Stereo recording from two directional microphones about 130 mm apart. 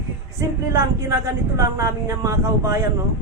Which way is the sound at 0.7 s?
20° right (ahead or behind).